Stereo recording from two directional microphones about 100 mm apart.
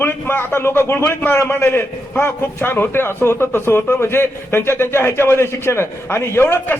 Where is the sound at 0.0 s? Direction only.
25° left (ahead or behind).